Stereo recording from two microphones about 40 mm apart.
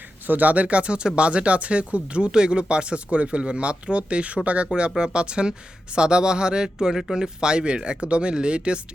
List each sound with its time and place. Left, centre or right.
0.3 s speech: right
4.7 s speech: right